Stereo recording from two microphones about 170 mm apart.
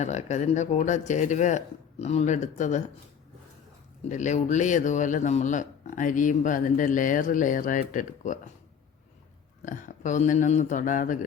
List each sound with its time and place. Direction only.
0.0 s speech: 40° left (ahead or behind)
4.1 s speech: 45° left (ahead or behind)
9.6 s speech: 50° left (ahead or behind)